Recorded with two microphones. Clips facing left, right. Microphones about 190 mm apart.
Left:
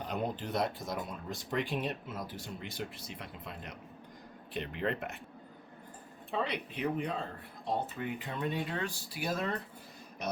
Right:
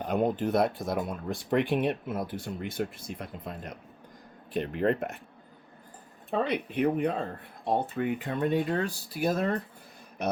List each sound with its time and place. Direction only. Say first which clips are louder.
0.0 s speech: right 9 dB; 50° right (ahead or behind)
6.3 s speech: right 7 dB; 55° right (ahead or behind)